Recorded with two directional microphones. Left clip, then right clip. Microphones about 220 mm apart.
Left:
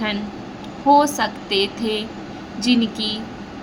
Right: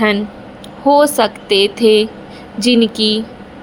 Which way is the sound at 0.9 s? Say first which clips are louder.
Right 5 dB; 35° right (ahead or behind).